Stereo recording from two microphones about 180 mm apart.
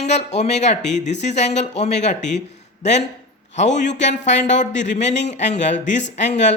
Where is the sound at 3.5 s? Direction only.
40° left (ahead or behind).